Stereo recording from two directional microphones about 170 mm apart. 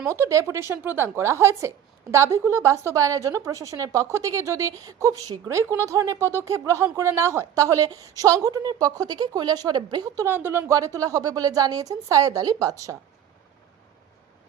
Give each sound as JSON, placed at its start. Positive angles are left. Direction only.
{"t": 0.0, "sound": "a woman's voice", "side_deg": -15}